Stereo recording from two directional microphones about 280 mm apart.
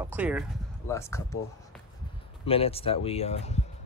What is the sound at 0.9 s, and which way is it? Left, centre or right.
Speech, centre.